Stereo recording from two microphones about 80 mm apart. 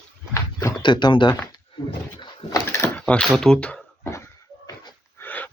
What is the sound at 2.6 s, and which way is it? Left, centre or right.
Drawer open or close, left.